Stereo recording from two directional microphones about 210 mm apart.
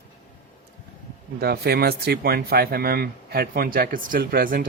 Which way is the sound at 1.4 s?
50° right (ahead or behind).